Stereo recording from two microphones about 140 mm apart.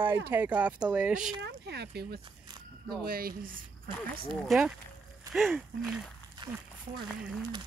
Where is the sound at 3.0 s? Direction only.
90° right.